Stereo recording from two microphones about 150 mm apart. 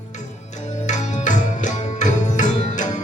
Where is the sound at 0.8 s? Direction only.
55° left (ahead or behind).